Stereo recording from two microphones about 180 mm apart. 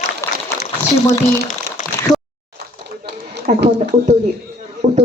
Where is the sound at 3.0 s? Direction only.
70° right (ahead or behind).